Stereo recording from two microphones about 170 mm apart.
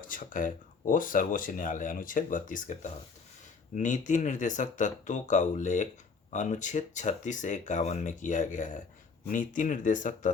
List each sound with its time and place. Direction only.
0.1 s speech: 55° left (ahead or behind)